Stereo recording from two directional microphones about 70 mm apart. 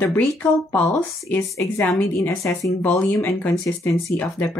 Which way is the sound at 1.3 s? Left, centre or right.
Left.